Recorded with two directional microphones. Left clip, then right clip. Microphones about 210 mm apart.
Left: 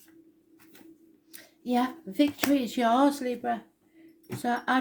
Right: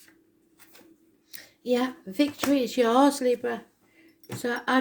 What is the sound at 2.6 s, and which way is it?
Speech, 35° right (ahead or behind).